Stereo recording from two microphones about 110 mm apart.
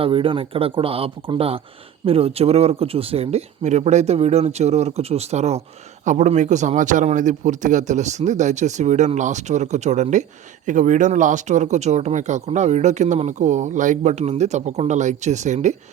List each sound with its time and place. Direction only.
0.0 s speech: 55° right (ahead or behind); by 5.6 s 75° right (ahead or behind)
6.1 s speech: 90° right